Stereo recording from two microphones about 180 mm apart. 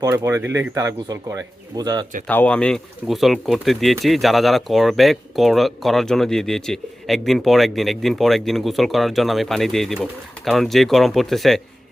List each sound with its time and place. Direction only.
0.0 s speech: 20° right (ahead or behind)
2.2 s speech: 5° left (ahead or behind)